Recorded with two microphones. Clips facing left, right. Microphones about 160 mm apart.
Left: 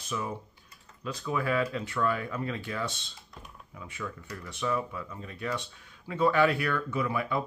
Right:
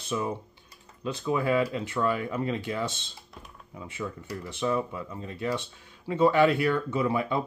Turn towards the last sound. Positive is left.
turn(degrees=-25)  # may be behind; listen again after turning